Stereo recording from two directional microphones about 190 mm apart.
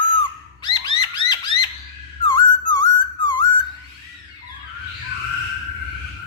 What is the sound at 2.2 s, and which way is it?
Whistling, 20° left (ahead or behind).